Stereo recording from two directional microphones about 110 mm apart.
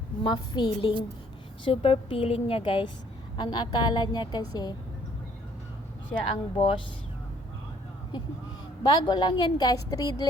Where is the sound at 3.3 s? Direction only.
40° left (ahead or behind).